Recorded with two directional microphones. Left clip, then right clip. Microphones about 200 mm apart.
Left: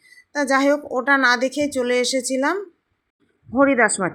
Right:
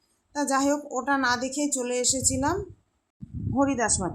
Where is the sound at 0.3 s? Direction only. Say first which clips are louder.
Left 7 dB; 10° left (ahead or behind).